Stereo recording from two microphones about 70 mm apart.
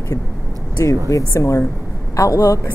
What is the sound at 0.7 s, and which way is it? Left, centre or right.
A woman's voice, left.